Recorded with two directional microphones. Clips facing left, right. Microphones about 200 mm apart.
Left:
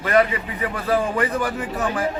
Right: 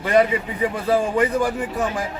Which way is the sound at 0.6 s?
15° right (ahead or behind).